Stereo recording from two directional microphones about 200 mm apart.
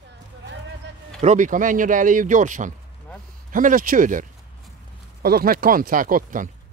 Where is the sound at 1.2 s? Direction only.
40° right (ahead or behind).